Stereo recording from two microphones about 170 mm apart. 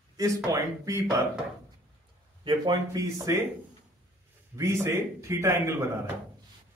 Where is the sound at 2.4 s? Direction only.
25° right (ahead or behind).